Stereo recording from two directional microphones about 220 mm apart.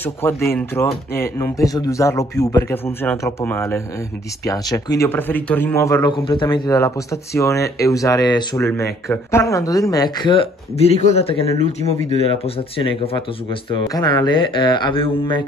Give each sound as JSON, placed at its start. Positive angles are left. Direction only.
{"t": 0.0, "sound": "a man's voice", "side_deg": 10}